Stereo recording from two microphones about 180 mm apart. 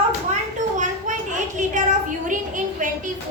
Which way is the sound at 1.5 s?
45° right (ahead or behind).